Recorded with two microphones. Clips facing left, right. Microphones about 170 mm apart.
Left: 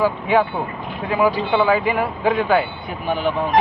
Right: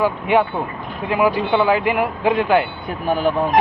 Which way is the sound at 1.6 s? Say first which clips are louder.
Right 1 dB; 10° right (ahead or behind).